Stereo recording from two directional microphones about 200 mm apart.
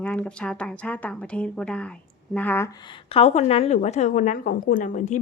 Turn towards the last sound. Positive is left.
turn(degrees=40)  # may be behind; listen again after turning